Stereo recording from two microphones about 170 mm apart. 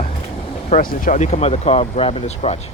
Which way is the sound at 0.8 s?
50° left (ahead or behind).